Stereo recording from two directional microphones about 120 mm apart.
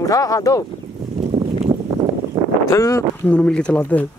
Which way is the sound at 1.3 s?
55° right (ahead or behind).